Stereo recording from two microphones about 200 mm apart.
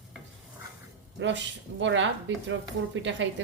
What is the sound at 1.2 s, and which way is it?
Speech, 65° right (ahead or behind).